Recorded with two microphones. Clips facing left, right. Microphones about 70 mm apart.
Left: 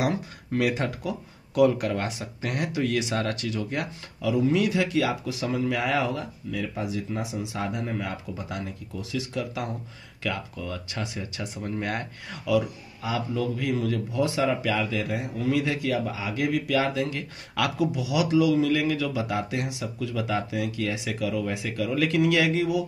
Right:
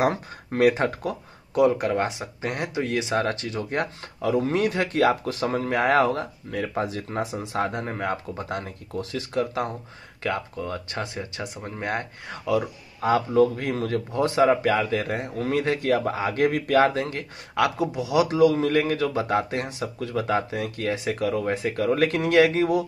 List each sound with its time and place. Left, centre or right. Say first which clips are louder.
0.0 s speech: right 3 dB; right
1.5 s a man's voice: right 1 dB; right
5.9 s a man's voice: right 6 dB; right
13.0 s a man's voice: right 9 dB; right
15.5 s speech: right 3 dB; right
15.9 s a man's voice: right 5 dB; right
17.0 s speech: even; right